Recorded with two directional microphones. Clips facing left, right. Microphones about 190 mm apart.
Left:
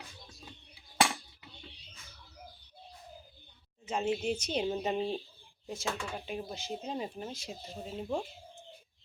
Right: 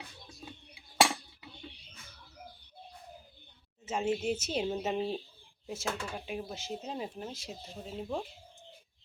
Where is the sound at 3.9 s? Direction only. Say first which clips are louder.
Even; 5° right (ahead or behind).